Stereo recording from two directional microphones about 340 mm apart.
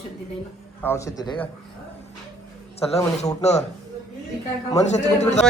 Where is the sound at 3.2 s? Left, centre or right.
Centre.